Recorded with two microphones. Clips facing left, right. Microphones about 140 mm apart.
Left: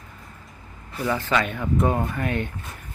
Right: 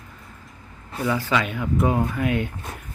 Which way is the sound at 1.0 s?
5° right (ahead or behind).